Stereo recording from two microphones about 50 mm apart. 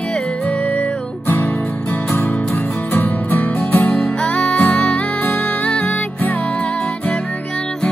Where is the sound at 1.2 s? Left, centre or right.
Left.